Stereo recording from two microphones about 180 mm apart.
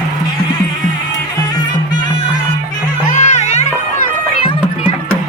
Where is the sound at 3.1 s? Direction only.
40° left (ahead or behind).